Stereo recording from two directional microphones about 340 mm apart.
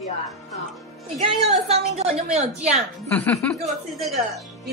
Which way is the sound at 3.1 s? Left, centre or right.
Centre.